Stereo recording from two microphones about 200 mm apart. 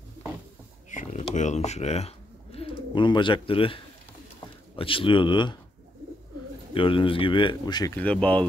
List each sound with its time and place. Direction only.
0.8 s a sound: 35° left (ahead or behind)
1.3 s bird: 35° left (ahead or behind)
2.9 s speech: 25° left (ahead or behind)
6.7 s speech: 25° left (ahead or behind); by 8.5 s 5° left (ahead or behind)